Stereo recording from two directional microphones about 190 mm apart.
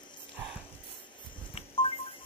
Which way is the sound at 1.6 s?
30° left (ahead or behind).